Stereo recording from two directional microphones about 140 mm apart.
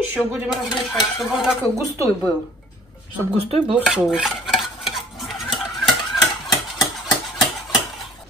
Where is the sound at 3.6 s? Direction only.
5° right (ahead or behind).